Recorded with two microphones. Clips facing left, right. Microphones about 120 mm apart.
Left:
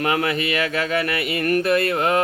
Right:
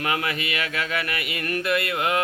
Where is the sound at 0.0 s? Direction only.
40° left (ahead or behind).